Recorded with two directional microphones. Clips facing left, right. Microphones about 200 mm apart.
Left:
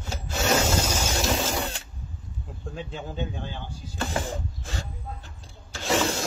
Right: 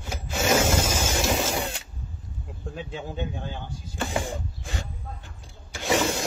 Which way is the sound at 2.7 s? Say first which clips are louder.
Even; centre (ahead or behind).